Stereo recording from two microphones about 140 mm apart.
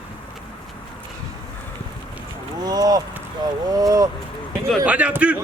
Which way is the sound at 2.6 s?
25° right (ahead or behind).